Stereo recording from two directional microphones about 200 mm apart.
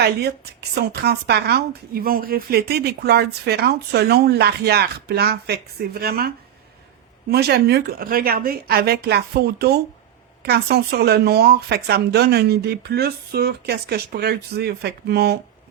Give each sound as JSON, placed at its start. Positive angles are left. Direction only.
{"t": 0.8, "sound": "a woman's voice", "side_deg": -55}